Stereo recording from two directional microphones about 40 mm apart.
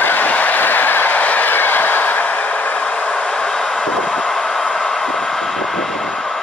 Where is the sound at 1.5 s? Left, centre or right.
Left.